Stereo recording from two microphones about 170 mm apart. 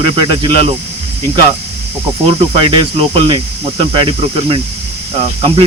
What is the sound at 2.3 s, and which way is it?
Speech, 30° right (ahead or behind).